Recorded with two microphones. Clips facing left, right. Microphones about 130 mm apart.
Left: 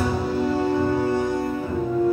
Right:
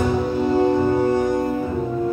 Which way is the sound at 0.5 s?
15° right (ahead or behind).